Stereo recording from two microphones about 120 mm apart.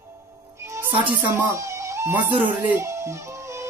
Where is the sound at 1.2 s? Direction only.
25° right (ahead or behind).